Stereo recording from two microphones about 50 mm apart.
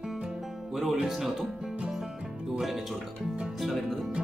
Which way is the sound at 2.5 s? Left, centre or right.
Centre.